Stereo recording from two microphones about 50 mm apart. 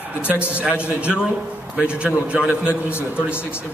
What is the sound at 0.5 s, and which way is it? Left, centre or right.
A man's voice, right.